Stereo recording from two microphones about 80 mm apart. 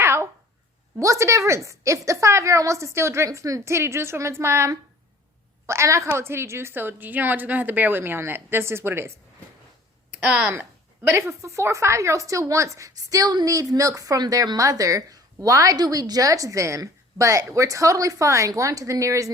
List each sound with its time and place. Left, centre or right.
0.0 s a sound: right
0.9 s a woman's voice: right
10.2 s speech: centre
10.5 s a woman's voice: right